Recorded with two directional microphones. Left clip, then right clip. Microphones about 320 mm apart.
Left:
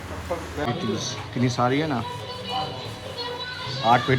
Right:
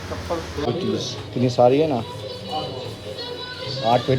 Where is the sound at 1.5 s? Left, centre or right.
Centre.